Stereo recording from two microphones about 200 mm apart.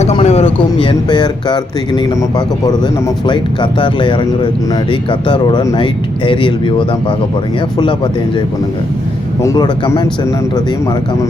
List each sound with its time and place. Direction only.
0.0 s speech: 30° left (ahead or behind)
9.4 s speech: 15° left (ahead or behind)